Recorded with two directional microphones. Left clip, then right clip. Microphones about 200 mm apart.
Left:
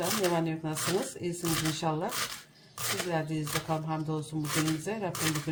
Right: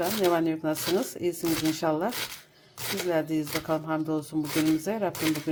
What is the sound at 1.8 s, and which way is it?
Speech, 40° right (ahead or behind).